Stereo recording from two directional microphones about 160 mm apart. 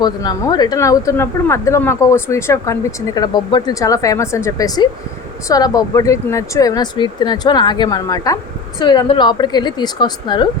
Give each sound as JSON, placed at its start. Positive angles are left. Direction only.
{"t": 0.0, "sound": "speech", "side_deg": 25}